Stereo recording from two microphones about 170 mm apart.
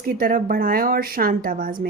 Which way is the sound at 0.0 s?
60° right (ahead or behind).